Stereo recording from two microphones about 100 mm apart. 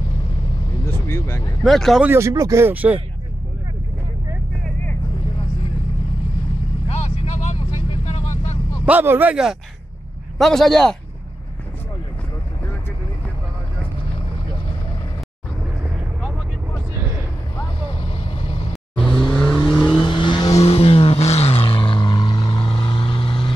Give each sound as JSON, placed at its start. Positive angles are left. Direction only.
{"t": 1.0, "sound": "vehicle", "side_deg": 25}
{"t": 1.6, "sound": "a man's voice", "side_deg": 0}
{"t": 2.0, "sound": "speech", "side_deg": -30}
{"t": 7.7, "sound": "vehicle", "side_deg": 80}
{"t": 8.8, "sound": "a man's voice", "side_deg": -20}
{"t": 9.3, "sound": "a man's voice", "side_deg": -5}
{"t": 17.9, "sound": "vehicle", "side_deg": 65}
{"t": 18.9, "sound": "vehicle", "side_deg": 10}
{"t": 20.0, "sound": "vehicle", "side_deg": 55}
{"t": 20.5, "sound": "vehicle", "side_deg": 90}